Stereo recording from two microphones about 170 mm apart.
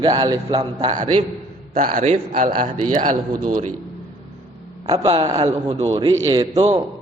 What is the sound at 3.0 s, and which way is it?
Speech, 50° right (ahead or behind).